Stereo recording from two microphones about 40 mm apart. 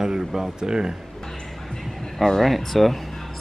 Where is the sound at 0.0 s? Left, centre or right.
Centre.